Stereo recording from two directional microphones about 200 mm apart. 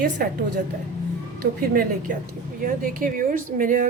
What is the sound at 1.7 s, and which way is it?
A woman's voice, 45° right (ahead or behind).